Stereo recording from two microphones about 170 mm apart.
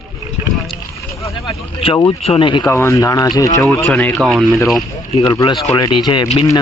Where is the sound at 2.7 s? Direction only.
15° left (ahead or behind).